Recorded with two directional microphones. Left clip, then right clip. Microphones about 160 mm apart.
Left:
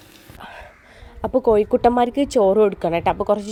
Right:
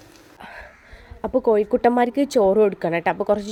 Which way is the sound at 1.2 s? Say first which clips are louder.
Left 2 dB; 10° left (ahead or behind).